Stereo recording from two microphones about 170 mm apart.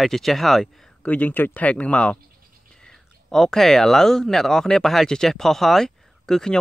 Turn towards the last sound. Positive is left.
turn(degrees=5)  # may be behind; listen again after turning